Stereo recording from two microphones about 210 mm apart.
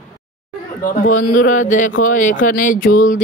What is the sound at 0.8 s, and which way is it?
Speech, 40° left (ahead or behind).